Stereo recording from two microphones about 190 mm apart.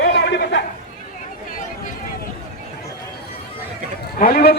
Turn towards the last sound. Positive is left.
turn(degrees=50)  # may be behind; listen again after turning